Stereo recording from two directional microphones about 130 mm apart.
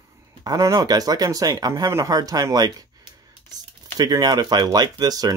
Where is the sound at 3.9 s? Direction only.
30° right (ahead or behind).